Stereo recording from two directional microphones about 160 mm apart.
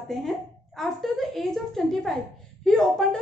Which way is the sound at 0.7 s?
Centre (ahead or behind).